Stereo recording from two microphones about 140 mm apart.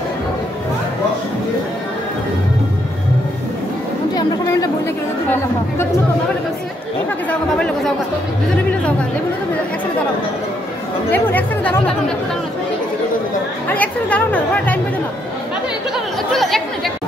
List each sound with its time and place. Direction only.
4.1 s chatter: 25° left (ahead or behind)
7.2 s chatter: 5° left (ahead or behind)
11.1 s chatter: 15° left (ahead or behind)
13.7 s chatter: 10° left (ahead or behind)
16.3 s speech: centre (ahead or behind)